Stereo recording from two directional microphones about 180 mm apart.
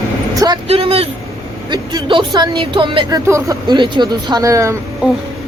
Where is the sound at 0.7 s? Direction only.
35° right (ahead or behind).